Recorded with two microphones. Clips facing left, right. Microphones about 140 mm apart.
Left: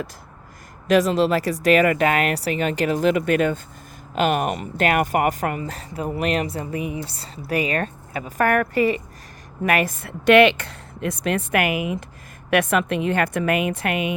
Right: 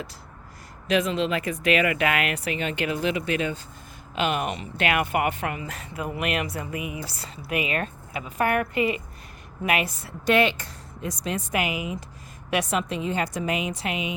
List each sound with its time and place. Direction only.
0.9 s a woman's voice: 40° left (ahead or behind)